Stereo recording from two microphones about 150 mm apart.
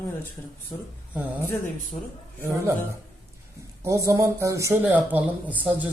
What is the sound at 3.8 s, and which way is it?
Speech, 20° right (ahead or behind).